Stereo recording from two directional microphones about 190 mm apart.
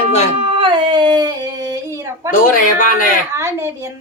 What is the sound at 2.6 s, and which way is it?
Speech, 45° left (ahead or behind).